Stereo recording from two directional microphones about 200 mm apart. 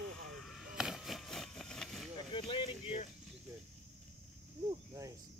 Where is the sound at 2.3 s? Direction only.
25° left (ahead or behind).